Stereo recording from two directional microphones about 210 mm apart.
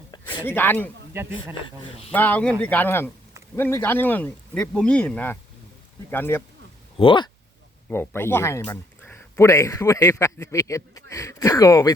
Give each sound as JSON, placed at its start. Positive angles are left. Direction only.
{"t": 0.4, "sound": "speech", "side_deg": 10}
{"t": 1.1, "sound": "speech", "side_deg": -10}
{"t": 1.6, "sound": "speech", "side_deg": 25}
{"t": 2.1, "sound": "speech", "side_deg": 10}
{"t": 6.9, "sound": "speech", "side_deg": 25}
{"t": 7.9, "sound": "speech", "side_deg": 10}